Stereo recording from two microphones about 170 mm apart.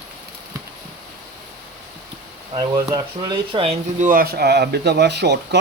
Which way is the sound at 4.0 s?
55° right (ahead or behind).